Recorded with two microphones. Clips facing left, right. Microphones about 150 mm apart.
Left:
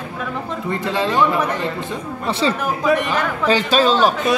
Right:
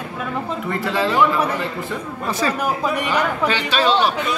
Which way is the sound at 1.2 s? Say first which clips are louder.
Even; 10° right (ahead or behind).